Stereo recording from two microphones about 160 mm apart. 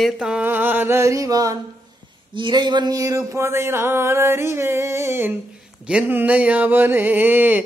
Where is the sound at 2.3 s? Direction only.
30° right (ahead or behind).